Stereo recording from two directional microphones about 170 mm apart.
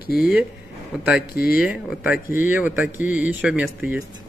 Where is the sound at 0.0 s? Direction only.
65° left (ahead or behind).